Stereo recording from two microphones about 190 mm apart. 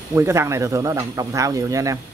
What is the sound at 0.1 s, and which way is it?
Speech, 15° right (ahead or behind).